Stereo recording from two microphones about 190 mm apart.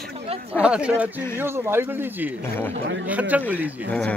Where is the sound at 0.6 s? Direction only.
5° right (ahead or behind).